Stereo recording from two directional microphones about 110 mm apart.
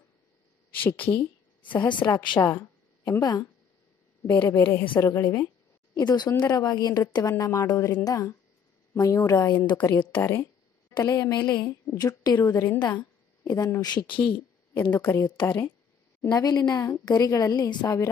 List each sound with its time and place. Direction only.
0.7 s speech: 15° left (ahead or behind)
1.7 s a woman's voice: 45° left (ahead or behind)
4.3 s a woman's voice: 20° left (ahead or behind)
9.9 s speech: 20° left (ahead or behind)
11.1 s a woman's voice: 35° left (ahead or behind)
12.7 s a sound: 40° left (ahead or behind)
13.7 s a woman's voice: 40° left (ahead or behind)
14.7 s a woman's voice: 15° left (ahead or behind)
16.3 s a woman's voice: 35° left (ahead or behind)